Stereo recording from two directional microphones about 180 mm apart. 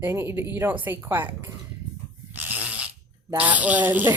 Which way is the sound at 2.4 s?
10° right (ahead or behind).